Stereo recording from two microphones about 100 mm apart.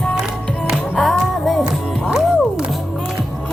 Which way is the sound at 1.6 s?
10° right (ahead or behind).